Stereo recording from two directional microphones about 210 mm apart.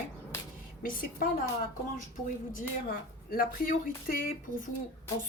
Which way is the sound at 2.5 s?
45° left (ahead or behind).